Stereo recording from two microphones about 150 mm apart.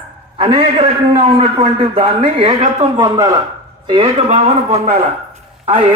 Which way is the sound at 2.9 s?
25° right (ahead or behind).